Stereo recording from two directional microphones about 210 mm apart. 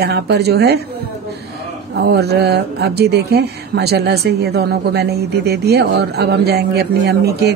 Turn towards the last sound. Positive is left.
turn(degrees=-50)  # may be behind; listen again after turning